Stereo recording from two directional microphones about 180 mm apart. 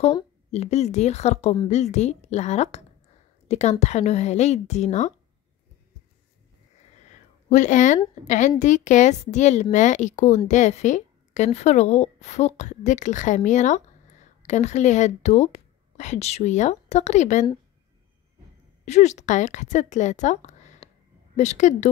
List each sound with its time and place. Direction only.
0.5 s a woman's voice: 35° left (ahead or behind)
7.4 s a woman's voice: 45° left (ahead or behind)
18.9 s a woman's voice: 40° left (ahead or behind)